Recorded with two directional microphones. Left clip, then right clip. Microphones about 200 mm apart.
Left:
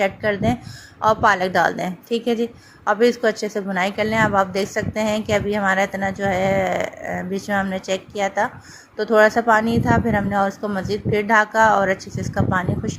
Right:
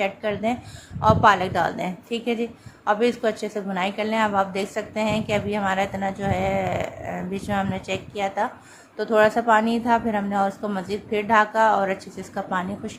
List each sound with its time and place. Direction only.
0.0 s a woman's voice: 15° left (ahead or behind)